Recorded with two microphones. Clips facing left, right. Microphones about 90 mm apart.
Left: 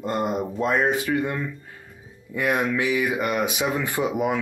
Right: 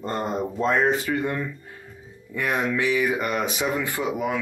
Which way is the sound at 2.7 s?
15° left (ahead or behind).